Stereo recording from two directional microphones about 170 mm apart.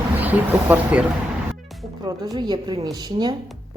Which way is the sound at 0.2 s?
10° right (ahead or behind).